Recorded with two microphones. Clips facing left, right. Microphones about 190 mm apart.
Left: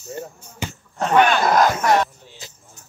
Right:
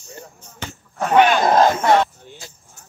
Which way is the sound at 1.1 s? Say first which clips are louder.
Right 2 dB; 20° right (ahead or behind).